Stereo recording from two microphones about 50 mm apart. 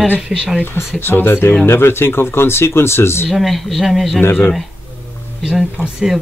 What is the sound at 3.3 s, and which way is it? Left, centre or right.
Speech, centre.